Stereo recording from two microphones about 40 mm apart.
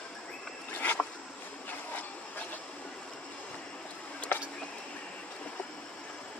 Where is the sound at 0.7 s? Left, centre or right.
Left.